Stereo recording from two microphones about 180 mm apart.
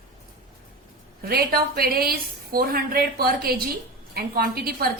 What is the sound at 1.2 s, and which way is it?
A woman's voice, 55° right (ahead or behind).